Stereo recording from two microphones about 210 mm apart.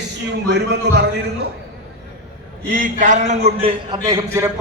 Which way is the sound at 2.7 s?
40° right (ahead or behind).